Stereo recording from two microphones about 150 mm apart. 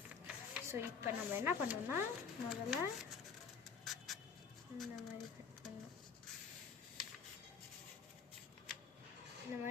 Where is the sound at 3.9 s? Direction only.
Centre (ahead or behind).